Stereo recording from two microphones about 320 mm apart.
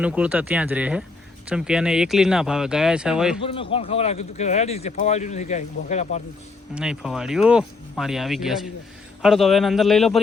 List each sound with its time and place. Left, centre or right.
0.0 s speech: centre
3.4 s speech: centre
6.7 s speech: centre